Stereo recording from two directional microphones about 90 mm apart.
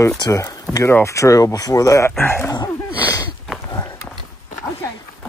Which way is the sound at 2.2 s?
25° left (ahead or behind).